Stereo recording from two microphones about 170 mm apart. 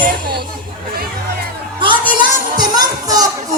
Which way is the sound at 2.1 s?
25° right (ahead or behind).